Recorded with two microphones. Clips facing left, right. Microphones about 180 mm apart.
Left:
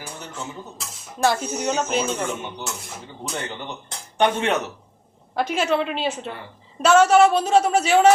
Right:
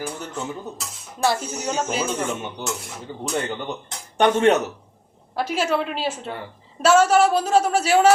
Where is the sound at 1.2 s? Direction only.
Centre (ahead or behind).